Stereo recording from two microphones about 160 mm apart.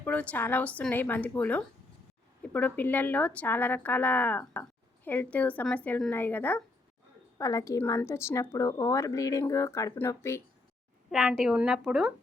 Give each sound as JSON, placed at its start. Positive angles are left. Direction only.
{"t": 0.0, "sound": "a woman's voice", "side_deg": 10}
{"t": 11.1, "sound": "a woman's voice", "side_deg": -5}